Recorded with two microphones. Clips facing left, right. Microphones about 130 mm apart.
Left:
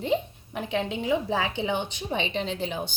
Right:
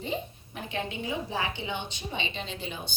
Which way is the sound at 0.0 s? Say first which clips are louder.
Left 7 dB; 75° left (ahead or behind).